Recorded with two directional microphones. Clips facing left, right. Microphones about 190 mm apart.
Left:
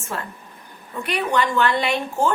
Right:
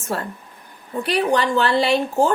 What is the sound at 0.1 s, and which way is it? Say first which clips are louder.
Speech: right 4 dB; 40° right (ahead or behind).